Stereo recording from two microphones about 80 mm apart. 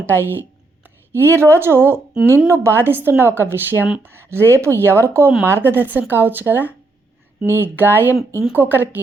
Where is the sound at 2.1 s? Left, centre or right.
Centre.